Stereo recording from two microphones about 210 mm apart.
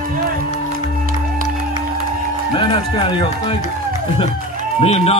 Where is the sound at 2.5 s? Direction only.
25° left (ahead or behind).